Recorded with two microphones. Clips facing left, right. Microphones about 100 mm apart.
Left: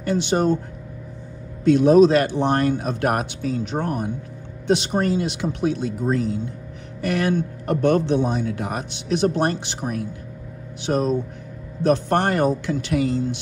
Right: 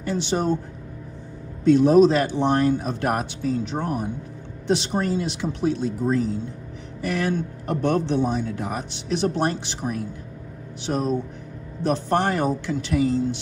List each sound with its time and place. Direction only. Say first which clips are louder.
0.0 s speech: left 4 dB; 65° left (ahead or behind)
1.6 s speech: left 1 dB; 75° left (ahead or behind); by 10.0 s 55° left (ahead or behind)
11.8 s speech: left 3 dB; 60° left (ahead or behind)